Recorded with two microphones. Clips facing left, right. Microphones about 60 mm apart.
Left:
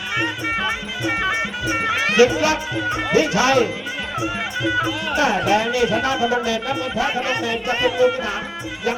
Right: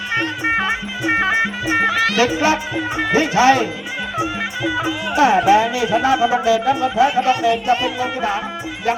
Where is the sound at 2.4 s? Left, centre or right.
Right.